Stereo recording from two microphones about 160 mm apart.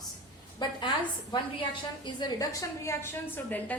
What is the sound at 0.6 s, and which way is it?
A woman's voice, 30° left (ahead or behind).